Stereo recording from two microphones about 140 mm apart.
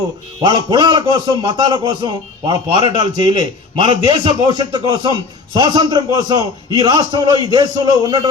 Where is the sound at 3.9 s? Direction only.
30° right (ahead or behind).